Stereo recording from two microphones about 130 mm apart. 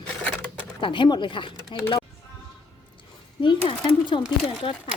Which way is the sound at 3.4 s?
40° left (ahead or behind).